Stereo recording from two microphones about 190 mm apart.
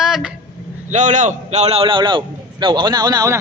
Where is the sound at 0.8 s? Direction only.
40° right (ahead or behind); by 3.3 s 20° right (ahead or behind).